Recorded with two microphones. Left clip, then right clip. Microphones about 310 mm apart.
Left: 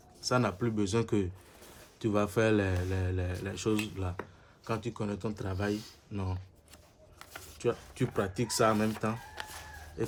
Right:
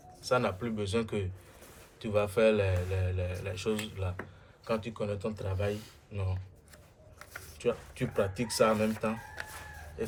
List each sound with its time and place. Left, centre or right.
0.2 s a man's voice: left
7.6 s speech: left